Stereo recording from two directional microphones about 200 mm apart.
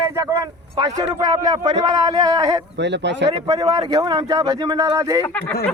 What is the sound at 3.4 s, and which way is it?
A man's voice, 20° right (ahead or behind).